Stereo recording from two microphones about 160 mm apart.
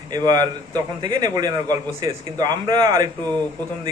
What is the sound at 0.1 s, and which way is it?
A man's voice, 25° right (ahead or behind).